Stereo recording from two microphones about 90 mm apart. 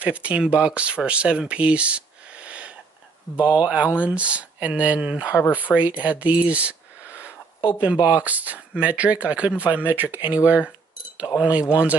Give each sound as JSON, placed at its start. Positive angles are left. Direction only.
{"t": 0.0, "sound": "speech", "side_deg": -15}
{"t": 5.3, "sound": "speech", "side_deg": 30}
{"t": 5.6, "sound": "speech", "side_deg": -15}